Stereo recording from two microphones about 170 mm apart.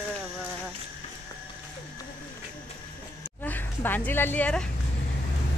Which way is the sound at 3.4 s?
10° left (ahead or behind).